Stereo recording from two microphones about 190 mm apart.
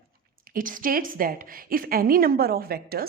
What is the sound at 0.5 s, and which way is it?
A woman's voice, 45° right (ahead or behind).